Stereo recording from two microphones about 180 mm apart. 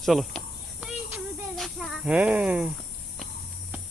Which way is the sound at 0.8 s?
Centre (ahead or behind).